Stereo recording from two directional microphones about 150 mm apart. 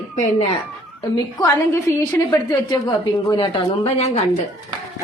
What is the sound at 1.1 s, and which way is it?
A woman's voice, 20° left (ahead or behind).